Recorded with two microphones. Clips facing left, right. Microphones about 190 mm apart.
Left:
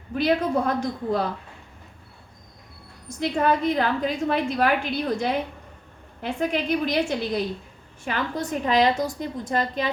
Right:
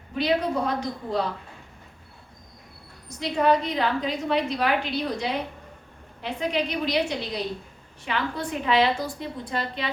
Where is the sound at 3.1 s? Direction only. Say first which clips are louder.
Even; 50° left (ahead or behind).